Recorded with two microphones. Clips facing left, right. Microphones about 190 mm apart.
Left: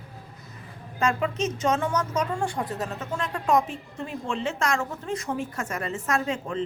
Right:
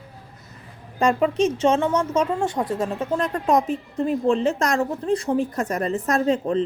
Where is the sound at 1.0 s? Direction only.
35° right (ahead or behind).